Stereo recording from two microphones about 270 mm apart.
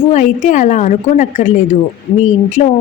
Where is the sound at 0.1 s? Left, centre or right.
Left.